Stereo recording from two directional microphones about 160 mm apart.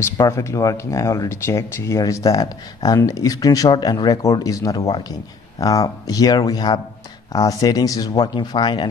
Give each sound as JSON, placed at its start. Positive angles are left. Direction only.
{"t": 0.0, "sound": "speech", "side_deg": 20}